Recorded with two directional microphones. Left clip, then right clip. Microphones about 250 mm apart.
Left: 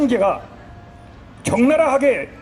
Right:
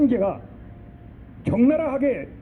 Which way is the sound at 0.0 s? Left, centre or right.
Left.